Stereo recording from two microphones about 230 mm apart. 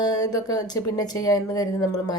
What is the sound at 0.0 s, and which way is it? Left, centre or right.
Speech, centre.